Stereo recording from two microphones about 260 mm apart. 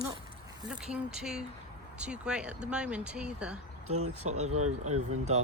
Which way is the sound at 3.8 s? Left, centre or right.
Right.